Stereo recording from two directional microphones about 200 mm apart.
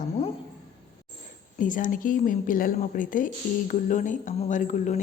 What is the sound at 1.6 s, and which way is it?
Speech, 40° left (ahead or behind).